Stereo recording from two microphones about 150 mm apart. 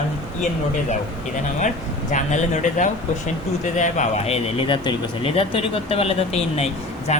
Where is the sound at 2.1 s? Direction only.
55° left (ahead or behind).